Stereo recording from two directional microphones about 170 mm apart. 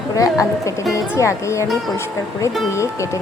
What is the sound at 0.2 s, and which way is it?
Speech, 20° left (ahead or behind).